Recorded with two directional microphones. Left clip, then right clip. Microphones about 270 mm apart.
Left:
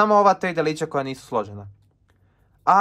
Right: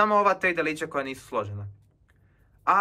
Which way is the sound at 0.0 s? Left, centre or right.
Centre.